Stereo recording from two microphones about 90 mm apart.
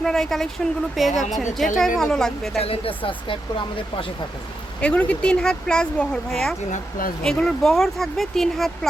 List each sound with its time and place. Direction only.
0.0 s speech: 5° left (ahead or behind)
2.6 s speech: 90° left; by 3.3 s 70° left (ahead or behind)
4.8 s speech: 15° left (ahead or behind)